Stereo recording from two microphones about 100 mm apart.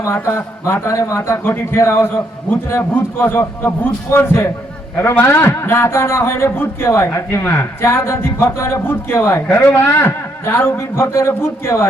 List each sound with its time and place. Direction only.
0.0 s a man's voice: 30° left (ahead or behind)